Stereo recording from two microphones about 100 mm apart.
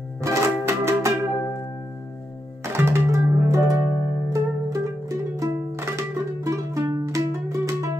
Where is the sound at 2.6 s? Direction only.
25° right (ahead or behind).